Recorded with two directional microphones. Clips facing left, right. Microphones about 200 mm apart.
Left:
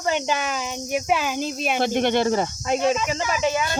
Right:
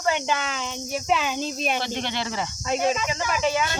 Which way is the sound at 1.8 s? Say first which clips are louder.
Left 8 dB; 55° left (ahead or behind).